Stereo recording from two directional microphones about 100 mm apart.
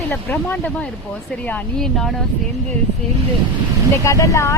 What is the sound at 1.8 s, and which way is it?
Speech, 5° left (ahead or behind).